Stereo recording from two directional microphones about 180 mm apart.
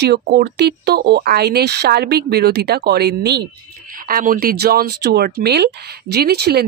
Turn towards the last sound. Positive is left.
turn(degrees=-65)  # may be behind; listen again after turning